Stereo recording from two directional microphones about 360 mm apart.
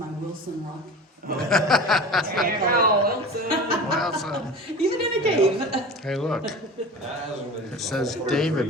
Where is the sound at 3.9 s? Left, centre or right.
Centre.